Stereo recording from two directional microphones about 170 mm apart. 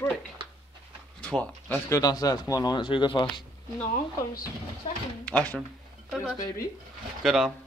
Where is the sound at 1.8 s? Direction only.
20° left (ahead or behind).